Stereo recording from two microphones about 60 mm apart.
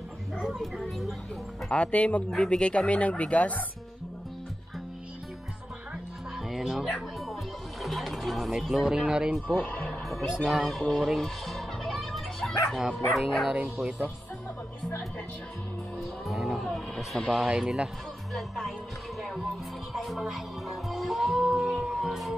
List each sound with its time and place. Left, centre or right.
0.6 s music: centre
1.7 s speech: left
2.3 s speech: centre
2.6 s speech: centre
6.5 s speech: centre
7.8 s music: centre
9.6 s speech: left
10.4 s music: centre
16.3 s music: centre
16.7 s speech: centre
17.3 s speech: centre
19.9 s music: centre